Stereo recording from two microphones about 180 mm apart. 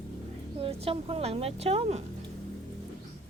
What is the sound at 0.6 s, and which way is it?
A woman's voice, 30° right (ahead or behind).